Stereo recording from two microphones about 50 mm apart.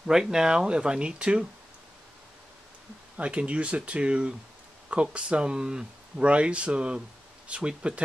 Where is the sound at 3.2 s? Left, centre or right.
Right.